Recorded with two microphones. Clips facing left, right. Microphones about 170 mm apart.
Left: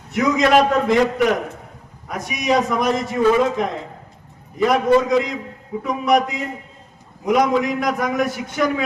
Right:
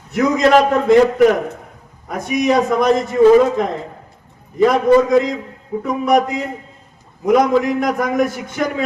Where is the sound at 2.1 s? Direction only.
50° right (ahead or behind).